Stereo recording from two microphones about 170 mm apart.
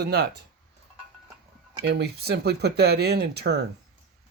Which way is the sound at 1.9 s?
70° right (ahead or behind).